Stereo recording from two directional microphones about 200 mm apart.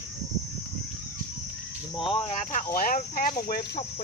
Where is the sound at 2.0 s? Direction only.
30° left (ahead or behind).